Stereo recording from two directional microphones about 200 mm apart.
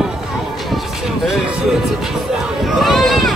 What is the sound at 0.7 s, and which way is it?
Music, centre (ahead or behind).